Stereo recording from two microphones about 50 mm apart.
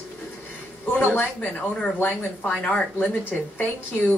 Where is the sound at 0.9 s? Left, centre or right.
Left.